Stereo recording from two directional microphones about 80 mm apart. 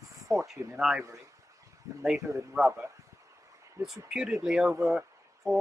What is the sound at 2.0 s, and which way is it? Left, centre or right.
Speech, centre.